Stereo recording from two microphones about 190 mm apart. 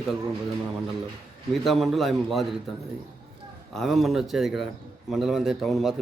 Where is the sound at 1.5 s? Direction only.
Centre (ahead or behind).